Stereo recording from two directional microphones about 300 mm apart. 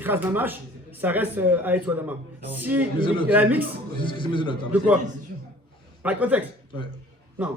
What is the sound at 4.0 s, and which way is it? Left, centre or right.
Speech, centre.